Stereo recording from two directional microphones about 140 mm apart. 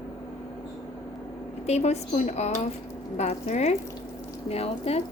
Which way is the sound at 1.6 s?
50° left (ahead or behind).